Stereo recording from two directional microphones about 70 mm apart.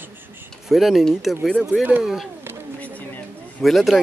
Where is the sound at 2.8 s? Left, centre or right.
Left.